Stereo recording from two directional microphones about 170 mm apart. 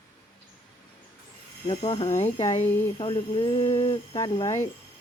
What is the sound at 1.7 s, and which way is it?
Speech, 30° left (ahead or behind).